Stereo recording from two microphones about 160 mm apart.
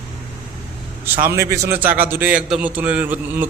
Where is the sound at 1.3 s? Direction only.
15° right (ahead or behind).